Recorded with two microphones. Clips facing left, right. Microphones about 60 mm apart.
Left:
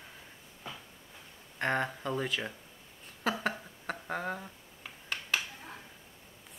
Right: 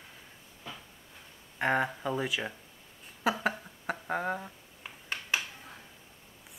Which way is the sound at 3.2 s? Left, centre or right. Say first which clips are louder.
Right 3 dB; centre.